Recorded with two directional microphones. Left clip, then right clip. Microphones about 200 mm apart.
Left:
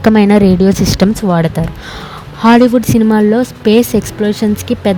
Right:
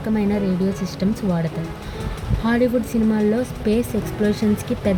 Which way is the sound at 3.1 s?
50° left (ahead or behind).